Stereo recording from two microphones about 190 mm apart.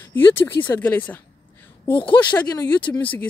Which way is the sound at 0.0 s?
10° left (ahead or behind).